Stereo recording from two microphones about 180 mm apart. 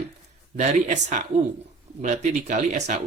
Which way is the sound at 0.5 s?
40° right (ahead or behind).